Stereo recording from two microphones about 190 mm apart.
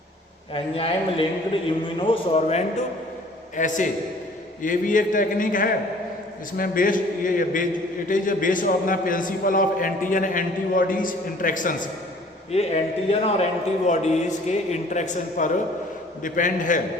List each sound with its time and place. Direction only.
0.5 s a man's voice: 30° left (ahead or behind)
12.5 s a man's voice: 35° left (ahead or behind)